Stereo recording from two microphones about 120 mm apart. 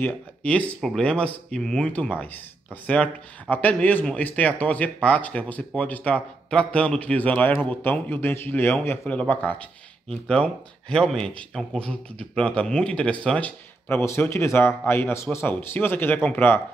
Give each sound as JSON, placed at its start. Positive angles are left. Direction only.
{"t": 0.0, "sound": "speech", "side_deg": 10}
{"t": 13.8, "sound": "speech", "side_deg": 20}